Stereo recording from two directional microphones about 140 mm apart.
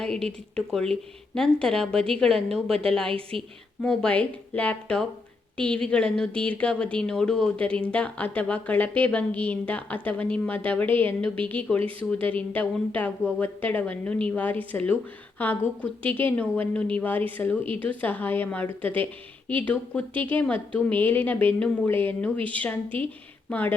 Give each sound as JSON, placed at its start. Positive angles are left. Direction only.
{"t": 0.0, "sound": "a woman's voice", "side_deg": 5}
{"t": 3.1, "sound": "a woman's voice", "side_deg": -40}
{"t": 3.8, "sound": "a woman's voice", "side_deg": 5}